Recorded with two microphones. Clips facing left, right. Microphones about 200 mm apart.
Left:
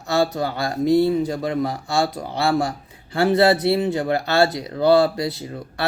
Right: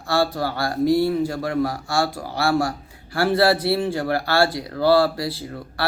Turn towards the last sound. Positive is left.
turn(degrees=20)  # may be behind; listen again after turning